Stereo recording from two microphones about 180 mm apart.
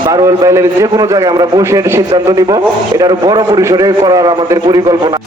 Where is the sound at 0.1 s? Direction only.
20° right (ahead or behind).